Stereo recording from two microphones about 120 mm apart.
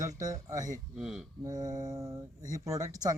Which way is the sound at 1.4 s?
30° right (ahead or behind).